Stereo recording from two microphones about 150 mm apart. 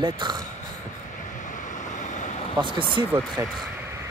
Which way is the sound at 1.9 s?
55° left (ahead or behind).